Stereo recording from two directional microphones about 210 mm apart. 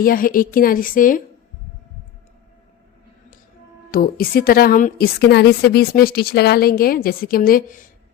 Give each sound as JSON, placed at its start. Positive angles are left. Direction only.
{"t": 0.0, "sound": "a woman's voice", "side_deg": 40}
{"t": 3.9, "sound": "a woman's voice", "side_deg": 45}